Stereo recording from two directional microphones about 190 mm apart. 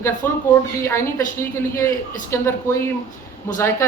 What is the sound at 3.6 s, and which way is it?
Speech, 15° left (ahead or behind).